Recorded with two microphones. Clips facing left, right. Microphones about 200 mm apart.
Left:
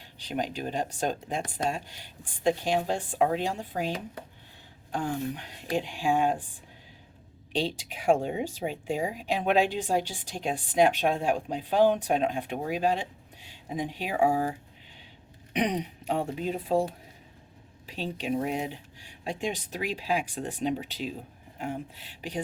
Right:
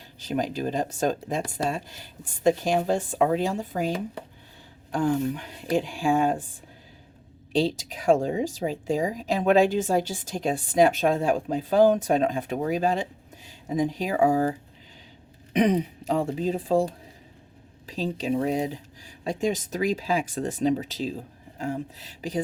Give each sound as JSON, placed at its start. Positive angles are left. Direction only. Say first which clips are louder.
{"t": 0.3, "sound": "speech", "louder": "right 5 dB", "side_deg": -45}
{"t": 7.5, "sound": "speech", "louder": "right 6 dB", "side_deg": -40}
{"t": 16.3, "sound": "speech", "louder": "right 5 dB", "side_deg": -35}
{"t": 17.9, "sound": "speech", "louder": "right 4 dB", "side_deg": -35}